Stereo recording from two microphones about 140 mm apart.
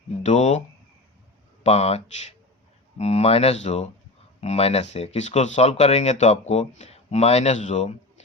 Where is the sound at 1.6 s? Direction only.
50° left (ahead or behind).